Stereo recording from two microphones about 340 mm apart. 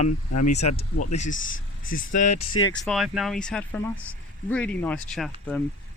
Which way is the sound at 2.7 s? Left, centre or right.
Centre.